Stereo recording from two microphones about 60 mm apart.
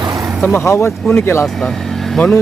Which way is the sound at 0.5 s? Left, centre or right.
Left.